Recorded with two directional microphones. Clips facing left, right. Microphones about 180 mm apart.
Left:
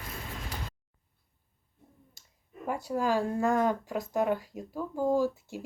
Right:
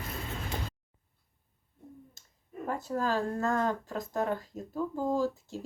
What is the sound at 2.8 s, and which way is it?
Speech, 15° left (ahead or behind).